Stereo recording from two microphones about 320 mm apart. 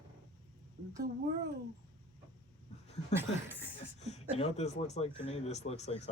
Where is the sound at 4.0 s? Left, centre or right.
Centre.